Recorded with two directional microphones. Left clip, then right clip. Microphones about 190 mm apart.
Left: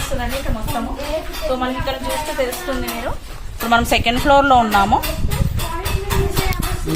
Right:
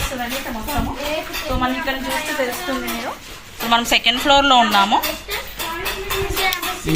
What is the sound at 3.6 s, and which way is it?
A woman's voice, 55° left (ahead or behind).